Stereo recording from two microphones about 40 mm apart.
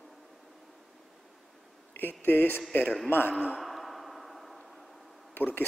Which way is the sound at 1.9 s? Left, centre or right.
Left.